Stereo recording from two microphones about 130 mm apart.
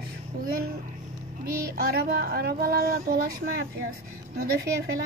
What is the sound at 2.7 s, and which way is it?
Speech, 90° right.